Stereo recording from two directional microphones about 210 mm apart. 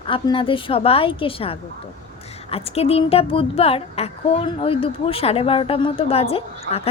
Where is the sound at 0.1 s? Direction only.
25° left (ahead or behind).